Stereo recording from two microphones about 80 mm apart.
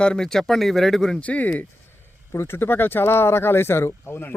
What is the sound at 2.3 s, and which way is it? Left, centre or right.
Speech, left.